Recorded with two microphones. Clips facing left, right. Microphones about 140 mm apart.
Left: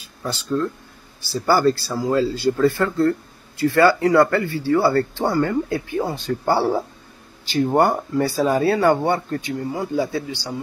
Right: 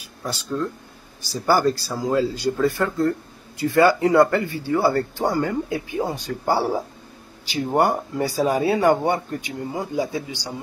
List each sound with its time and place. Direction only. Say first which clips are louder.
0.0 s speech: left 2 dB; 10° right (ahead or behind)